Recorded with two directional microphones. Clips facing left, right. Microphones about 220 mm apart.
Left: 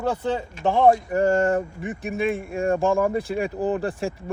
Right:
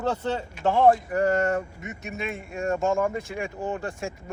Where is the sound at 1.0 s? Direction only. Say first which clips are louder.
Left 3 dB; 25° left (ahead or behind).